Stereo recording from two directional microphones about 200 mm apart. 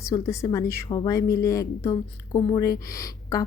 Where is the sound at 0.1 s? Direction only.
15° left (ahead or behind).